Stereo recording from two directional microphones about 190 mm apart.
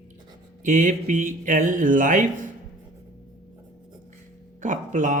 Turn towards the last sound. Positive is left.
turn(degrees=-40)  # may be behind; listen again after turning